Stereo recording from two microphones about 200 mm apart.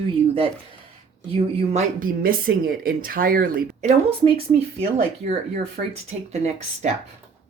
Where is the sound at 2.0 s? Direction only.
45° right (ahead or behind).